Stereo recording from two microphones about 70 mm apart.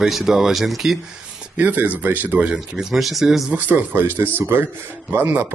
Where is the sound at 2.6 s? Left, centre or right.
Centre.